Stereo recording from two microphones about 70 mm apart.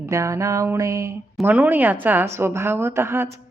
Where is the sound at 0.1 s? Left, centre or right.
Right.